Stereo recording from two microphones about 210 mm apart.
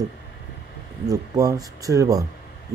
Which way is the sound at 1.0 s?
15° right (ahead or behind).